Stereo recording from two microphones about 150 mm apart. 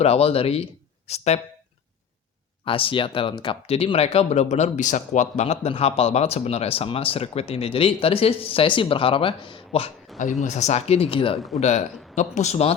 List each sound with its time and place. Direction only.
0.0 s speech: 45° left (ahead or behind)
2.6 s speech: 35° left (ahead or behind)
10.1 s a sound: centre (ahead or behind)
10.4 s speech: 50° left (ahead or behind)
11.3 s a man's voice: centre (ahead or behind)
11.6 s speech: 50° left (ahead or behind)